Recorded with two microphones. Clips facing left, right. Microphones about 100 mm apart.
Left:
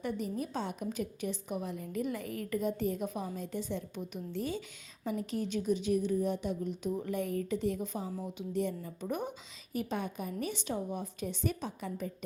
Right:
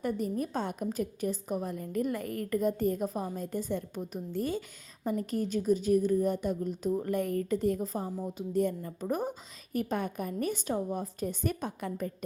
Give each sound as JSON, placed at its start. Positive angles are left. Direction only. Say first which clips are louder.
{"t": 0.0, "sound": "a woman's voice", "louder": "right 4 dB", "side_deg": -45}